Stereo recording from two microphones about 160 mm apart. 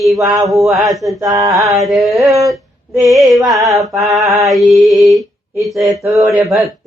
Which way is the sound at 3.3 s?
Centre (ahead or behind).